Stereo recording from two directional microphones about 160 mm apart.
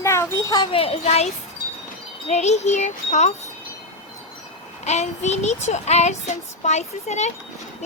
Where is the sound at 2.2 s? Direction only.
45° left (ahead or behind).